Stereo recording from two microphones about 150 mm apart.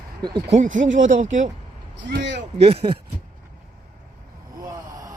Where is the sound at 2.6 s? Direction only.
40° right (ahead or behind).